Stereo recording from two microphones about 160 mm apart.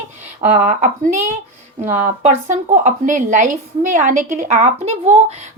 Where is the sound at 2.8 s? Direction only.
50° right (ahead or behind).